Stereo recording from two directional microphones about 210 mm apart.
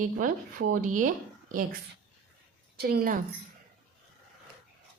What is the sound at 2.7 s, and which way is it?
Speech, 45° right (ahead or behind).